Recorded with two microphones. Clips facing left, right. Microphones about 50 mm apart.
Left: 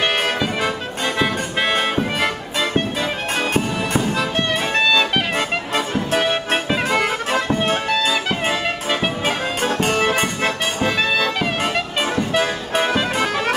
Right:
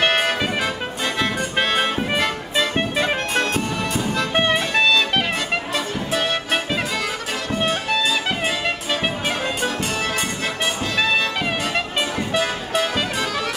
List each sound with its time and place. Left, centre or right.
0.0 s music: centre
1.0 s music: centre
4.6 s music: centre
6.9 s music: left
9.7 s music: left
11.0 s music: centre
12.4 s music: left